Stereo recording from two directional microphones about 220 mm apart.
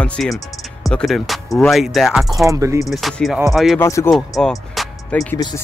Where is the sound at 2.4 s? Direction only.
15° right (ahead or behind).